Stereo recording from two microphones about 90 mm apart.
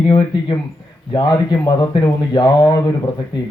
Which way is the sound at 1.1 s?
50° left (ahead or behind).